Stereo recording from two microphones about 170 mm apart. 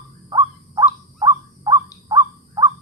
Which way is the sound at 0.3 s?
25° right (ahead or behind).